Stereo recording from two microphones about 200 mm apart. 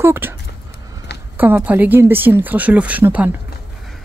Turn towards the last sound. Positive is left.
turn(degrees=-10)  # may be behind; listen again after turning